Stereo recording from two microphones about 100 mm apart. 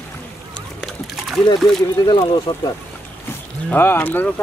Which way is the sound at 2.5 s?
65° left (ahead or behind).